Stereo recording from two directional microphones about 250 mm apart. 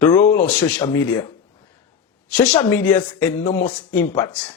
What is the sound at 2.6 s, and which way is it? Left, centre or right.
Speech, centre.